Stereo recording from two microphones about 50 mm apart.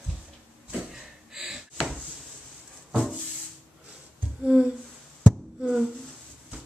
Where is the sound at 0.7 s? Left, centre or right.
Centre.